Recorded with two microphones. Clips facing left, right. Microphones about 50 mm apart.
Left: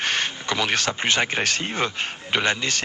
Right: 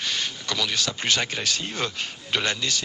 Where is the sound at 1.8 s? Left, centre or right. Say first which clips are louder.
Left 4 dB; left.